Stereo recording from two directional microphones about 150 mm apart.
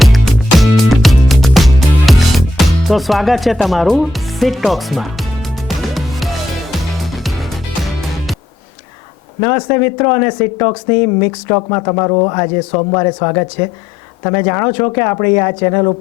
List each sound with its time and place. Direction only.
0.0 s music: centre (ahead or behind)
9.4 s speech: 20° left (ahead or behind)